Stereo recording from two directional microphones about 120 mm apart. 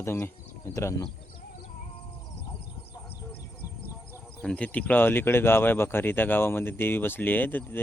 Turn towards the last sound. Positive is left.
turn(degrees=15)  # may be behind; listen again after turning